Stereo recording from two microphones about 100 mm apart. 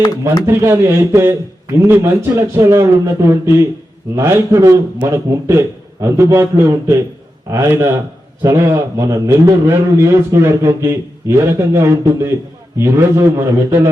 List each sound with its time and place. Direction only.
0.4 s speech: 25° right (ahead or behind)